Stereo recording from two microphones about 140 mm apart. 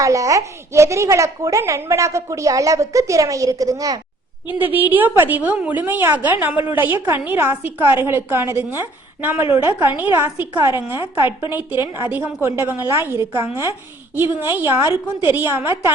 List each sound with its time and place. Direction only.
0.0 s a woman's voice: 25° right (ahead or behind)
4.5 s a woman's voice: 10° right (ahead or behind)